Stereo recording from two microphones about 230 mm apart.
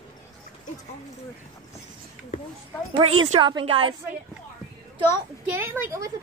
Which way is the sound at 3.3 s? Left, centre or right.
Centre.